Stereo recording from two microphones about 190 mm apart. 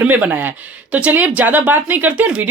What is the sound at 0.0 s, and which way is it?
Speech, 10° right (ahead or behind).